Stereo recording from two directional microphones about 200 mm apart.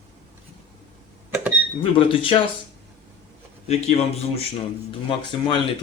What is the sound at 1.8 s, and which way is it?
Speech, 25° left (ahead or behind).